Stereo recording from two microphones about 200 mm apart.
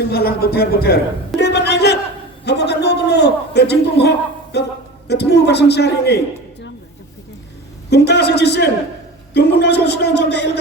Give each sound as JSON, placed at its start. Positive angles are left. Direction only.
{"t": 0.1, "sound": "speech", "side_deg": 50}
{"t": 1.4, "sound": "a sound", "side_deg": 55}
{"t": 4.5, "sound": "speech", "side_deg": 55}
{"t": 7.9, "sound": "speech", "side_deg": 55}